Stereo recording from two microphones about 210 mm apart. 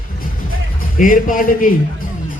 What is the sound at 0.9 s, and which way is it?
Speech, 40° left (ahead or behind).